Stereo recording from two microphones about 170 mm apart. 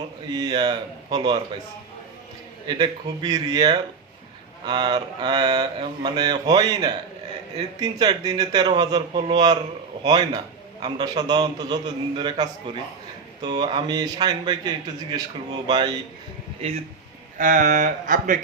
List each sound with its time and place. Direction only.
0.3 s a man's voice: 25° right (ahead or behind)
2.6 s a man's voice: 25° right (ahead or behind)
17.3 s speech: 50° right (ahead or behind)